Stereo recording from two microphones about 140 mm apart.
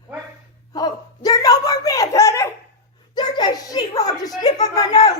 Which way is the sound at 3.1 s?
30° left (ahead or behind).